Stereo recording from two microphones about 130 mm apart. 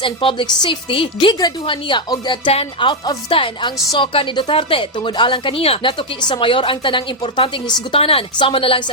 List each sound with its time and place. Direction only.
0.0 s a woman's voice: 40° left (ahead or behind)
2.5 s a woman's voice: 50° left (ahead or behind)